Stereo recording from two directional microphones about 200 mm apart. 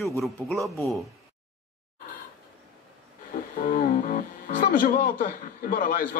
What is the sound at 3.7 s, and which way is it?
Music, 45° left (ahead or behind).